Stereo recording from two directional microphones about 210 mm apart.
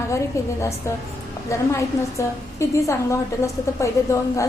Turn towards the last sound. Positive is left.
turn(degrees=15)  # may be behind; listen again after turning